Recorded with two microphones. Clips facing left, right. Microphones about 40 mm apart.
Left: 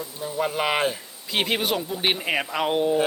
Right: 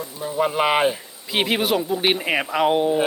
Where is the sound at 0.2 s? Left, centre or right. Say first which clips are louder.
Right 5 dB; centre.